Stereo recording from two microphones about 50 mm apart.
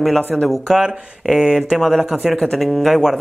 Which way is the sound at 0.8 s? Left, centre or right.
Centre.